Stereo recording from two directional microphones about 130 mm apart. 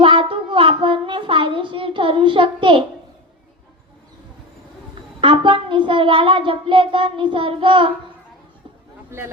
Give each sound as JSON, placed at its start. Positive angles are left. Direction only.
{"t": 0.0, "sound": "a sound", "side_deg": -40}
{"t": 5.2, "sound": "child singing", "side_deg": -40}
{"t": 9.0, "sound": "speech", "side_deg": -20}